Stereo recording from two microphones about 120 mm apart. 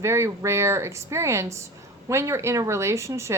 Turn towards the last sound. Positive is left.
turn(degrees=-25)  # may be behind; listen again after turning